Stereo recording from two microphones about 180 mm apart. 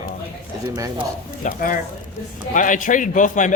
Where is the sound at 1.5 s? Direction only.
50° left (ahead or behind).